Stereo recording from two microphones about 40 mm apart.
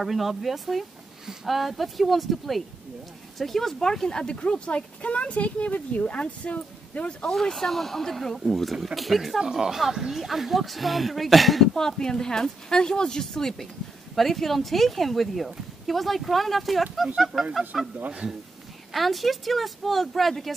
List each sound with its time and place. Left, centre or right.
0.0 s speech: centre; by 7.2 s left
7.5 s speech: centre
9.4 s speech: centre
11.7 s speech: centre
18.9 s speech: centre